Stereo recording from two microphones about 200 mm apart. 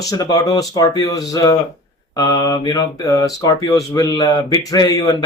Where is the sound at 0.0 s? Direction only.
20° left (ahead or behind).